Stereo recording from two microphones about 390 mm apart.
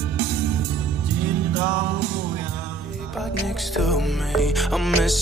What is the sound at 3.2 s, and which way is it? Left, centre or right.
Music, centre.